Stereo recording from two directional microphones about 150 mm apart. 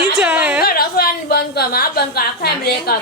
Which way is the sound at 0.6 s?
85° left.